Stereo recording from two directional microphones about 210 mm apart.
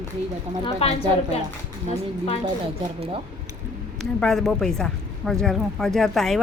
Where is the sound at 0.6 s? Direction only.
30° left (ahead or behind).